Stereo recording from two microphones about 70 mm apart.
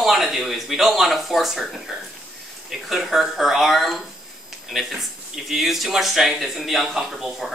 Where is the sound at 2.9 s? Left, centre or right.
Centre.